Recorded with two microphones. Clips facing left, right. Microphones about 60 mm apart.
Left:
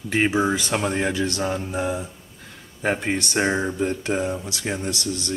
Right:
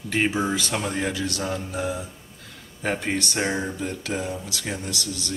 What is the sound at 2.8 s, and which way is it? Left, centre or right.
Speech, centre.